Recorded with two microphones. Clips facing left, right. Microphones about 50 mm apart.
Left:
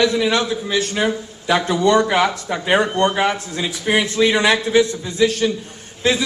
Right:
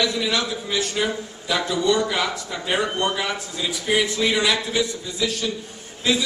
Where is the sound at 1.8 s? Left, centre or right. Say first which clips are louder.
Left 6 dB; left.